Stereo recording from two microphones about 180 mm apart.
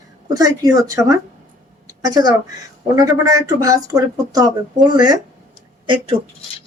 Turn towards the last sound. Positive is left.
turn(degrees=-30)  # may be behind; listen again after turning